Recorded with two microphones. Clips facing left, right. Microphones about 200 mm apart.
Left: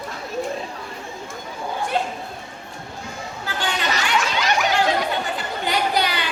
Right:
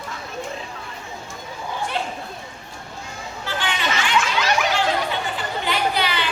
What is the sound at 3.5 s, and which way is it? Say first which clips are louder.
Chatter: even; 40° left (ahead or behind).